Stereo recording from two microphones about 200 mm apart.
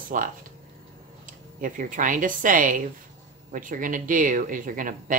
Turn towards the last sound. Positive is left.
turn(degrees=-40)  # may be behind; listen again after turning